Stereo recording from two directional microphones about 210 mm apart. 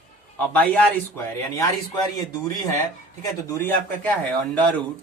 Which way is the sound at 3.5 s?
10° left (ahead or behind).